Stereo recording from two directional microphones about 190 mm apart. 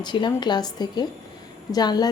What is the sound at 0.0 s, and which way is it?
Speech, 25° left (ahead or behind).